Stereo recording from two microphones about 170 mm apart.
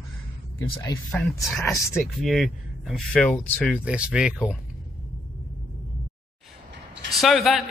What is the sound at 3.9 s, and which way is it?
Speech, 5° right (ahead or behind).